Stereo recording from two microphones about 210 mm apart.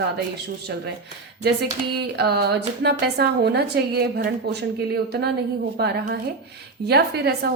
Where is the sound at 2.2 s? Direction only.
50° right (ahead or behind).